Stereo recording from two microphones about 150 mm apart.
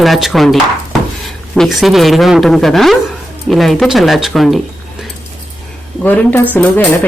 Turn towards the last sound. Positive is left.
turn(degrees=10)  # may be behind; listen again after turning